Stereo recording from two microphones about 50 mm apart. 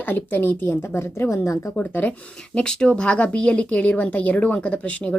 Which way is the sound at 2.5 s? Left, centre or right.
Centre.